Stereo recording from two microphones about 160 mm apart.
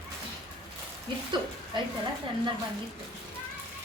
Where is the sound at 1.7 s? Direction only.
30° right (ahead or behind).